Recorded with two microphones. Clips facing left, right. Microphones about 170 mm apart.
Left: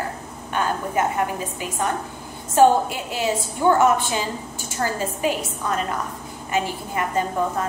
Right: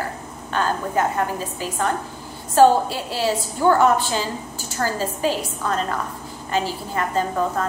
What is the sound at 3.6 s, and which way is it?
A woman's voice, 15° left (ahead or behind).